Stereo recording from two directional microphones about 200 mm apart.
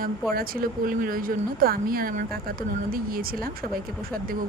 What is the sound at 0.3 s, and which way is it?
Speech, 45° right (ahead or behind).